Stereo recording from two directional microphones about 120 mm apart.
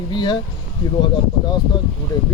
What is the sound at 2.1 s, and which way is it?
Speech, 35° left (ahead or behind).